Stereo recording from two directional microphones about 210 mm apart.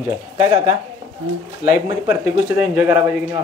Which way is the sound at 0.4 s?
15° right (ahead or behind).